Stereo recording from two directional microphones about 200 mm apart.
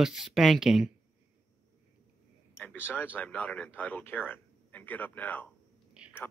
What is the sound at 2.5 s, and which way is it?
Speech, 10° left (ahead or behind).